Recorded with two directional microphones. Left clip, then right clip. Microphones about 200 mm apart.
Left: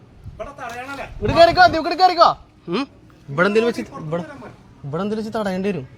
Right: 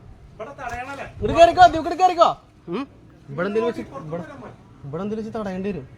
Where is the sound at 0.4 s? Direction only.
45° left (ahead or behind).